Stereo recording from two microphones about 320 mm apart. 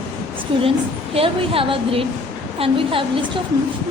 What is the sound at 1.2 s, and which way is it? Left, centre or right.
A woman's voice, centre.